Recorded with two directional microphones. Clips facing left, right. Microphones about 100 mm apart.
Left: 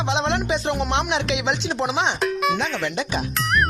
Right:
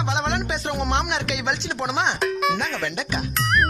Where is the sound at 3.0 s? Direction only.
25° left (ahead or behind).